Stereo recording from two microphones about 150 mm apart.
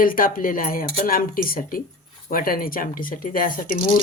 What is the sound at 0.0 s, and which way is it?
Speech, 70° left (ahead or behind).